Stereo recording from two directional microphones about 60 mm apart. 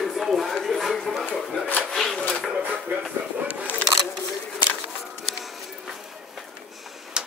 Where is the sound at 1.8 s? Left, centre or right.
Centre.